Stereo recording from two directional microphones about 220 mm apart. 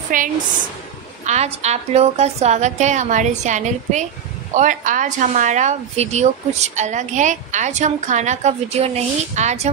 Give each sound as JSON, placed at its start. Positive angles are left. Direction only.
{"t": 0.1, "sound": "speech", "side_deg": -40}